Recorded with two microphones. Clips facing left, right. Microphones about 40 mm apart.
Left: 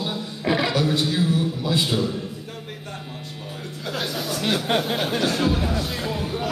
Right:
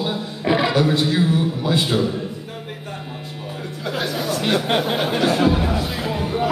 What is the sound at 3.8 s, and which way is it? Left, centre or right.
Speech, centre.